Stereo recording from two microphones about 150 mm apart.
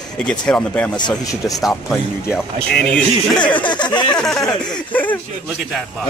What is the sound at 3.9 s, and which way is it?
Speech, 30° left (ahead or behind).